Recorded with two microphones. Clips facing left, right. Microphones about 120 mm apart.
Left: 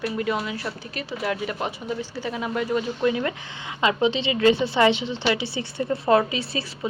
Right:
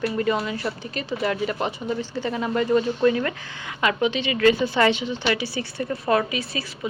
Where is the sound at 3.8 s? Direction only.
30° left (ahead or behind).